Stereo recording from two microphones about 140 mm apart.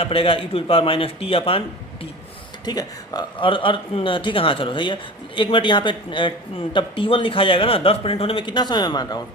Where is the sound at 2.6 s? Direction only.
30° left (ahead or behind).